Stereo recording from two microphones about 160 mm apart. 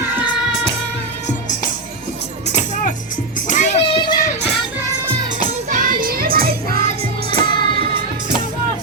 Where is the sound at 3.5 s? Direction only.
45° left (ahead or behind).